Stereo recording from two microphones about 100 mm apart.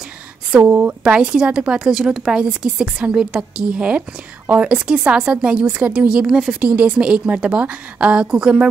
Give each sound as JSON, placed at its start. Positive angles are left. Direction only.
{"t": 0.5, "sound": "a woman's voice", "side_deg": -15}